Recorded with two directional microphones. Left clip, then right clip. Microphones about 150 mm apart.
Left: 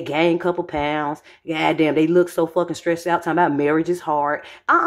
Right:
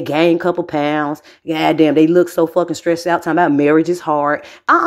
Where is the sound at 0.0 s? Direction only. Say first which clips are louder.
Right 5 dB; 35° right (ahead or behind).